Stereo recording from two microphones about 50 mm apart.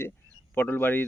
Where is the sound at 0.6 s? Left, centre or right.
Left.